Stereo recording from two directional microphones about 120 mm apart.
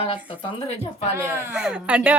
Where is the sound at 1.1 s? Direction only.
20° right (ahead or behind).